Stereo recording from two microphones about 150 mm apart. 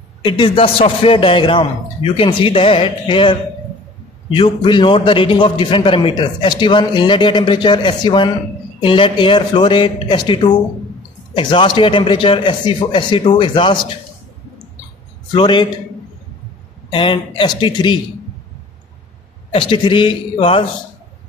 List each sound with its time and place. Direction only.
0.2 s a man's voice: 35° left (ahead or behind)
15.3 s a man's voice: 30° left (ahead or behind)
16.9 s a man's voice: 35° left (ahead or behind)
19.5 s a man's voice: 35° left (ahead or behind)